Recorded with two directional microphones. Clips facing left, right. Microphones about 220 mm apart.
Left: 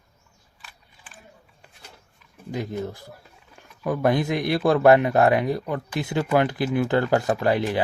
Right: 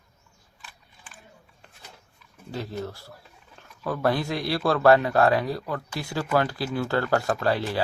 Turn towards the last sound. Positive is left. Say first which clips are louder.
# left 3 dB
turn(degrees=20)  # may be behind; listen again after turning